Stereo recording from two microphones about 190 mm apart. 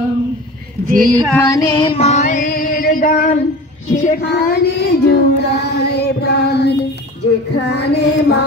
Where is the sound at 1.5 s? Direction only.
25° left (ahead or behind); by 3.4 s 45° left (ahead or behind).